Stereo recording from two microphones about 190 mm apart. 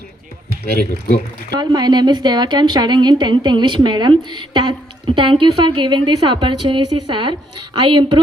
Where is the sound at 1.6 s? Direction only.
20° right (ahead or behind).